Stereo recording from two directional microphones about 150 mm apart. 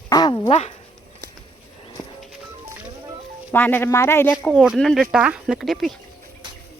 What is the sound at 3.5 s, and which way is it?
Speech, 15° left (ahead or behind).